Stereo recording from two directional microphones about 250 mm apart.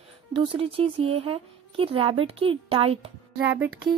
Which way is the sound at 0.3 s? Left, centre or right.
Right.